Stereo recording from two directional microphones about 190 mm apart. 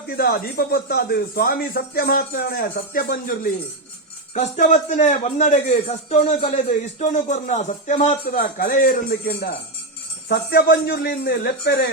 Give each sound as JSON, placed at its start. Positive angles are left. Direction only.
{"t": 0.1, "sound": "speech", "side_deg": 55}
{"t": 4.4, "sound": "a man's voice", "side_deg": 40}
{"t": 8.3, "sound": "speech", "side_deg": 50}